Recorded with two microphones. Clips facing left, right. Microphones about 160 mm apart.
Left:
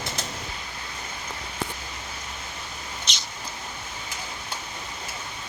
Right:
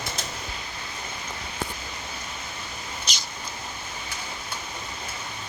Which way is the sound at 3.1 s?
Centre (ahead or behind).